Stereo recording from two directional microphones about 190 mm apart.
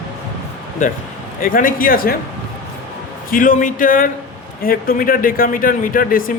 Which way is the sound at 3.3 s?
45° left (ahead or behind).